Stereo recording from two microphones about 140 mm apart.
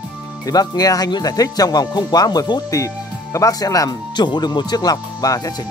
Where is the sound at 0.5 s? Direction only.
30° left (ahead or behind).